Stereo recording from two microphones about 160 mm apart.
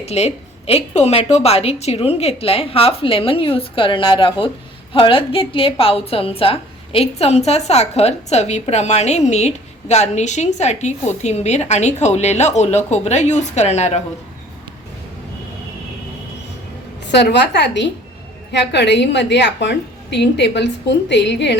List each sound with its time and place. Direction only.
0.0 s a woman's voice: 40° left (ahead or behind)
17.1 s a woman's voice: 90° left